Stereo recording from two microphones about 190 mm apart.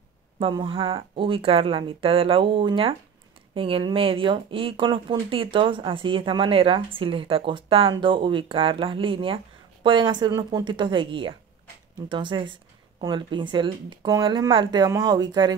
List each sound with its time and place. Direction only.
0.4 s speech: 25° right (ahead or behind)